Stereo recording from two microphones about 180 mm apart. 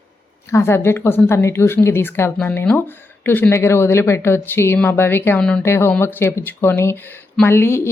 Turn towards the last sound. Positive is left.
turn(degrees=15)  # may be behind; listen again after turning